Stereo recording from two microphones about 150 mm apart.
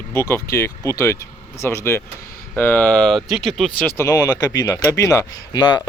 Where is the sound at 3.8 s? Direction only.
15° left (ahead or behind).